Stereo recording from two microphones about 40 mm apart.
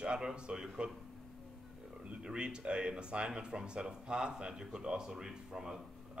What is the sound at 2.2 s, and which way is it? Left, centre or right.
Speech, right.